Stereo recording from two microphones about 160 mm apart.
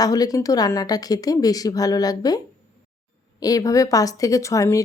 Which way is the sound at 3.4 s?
20° left (ahead or behind).